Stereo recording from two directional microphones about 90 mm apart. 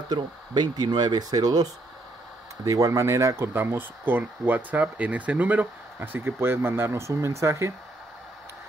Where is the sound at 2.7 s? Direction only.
35° right (ahead or behind).